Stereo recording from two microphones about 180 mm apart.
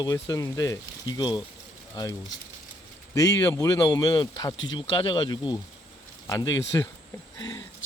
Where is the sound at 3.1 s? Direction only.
15° left (ahead or behind).